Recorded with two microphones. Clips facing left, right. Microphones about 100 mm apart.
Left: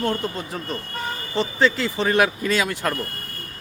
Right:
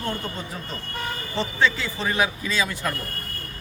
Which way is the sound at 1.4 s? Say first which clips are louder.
Left 3 dB; 65° left (ahead or behind).